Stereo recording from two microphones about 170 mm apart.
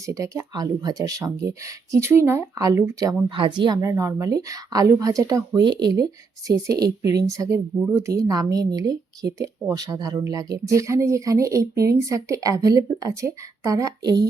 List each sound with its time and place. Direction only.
0.0 s a woman's voice: 20° right (ahead or behind)
3.2 s a woman's voice: 30° right (ahead or behind)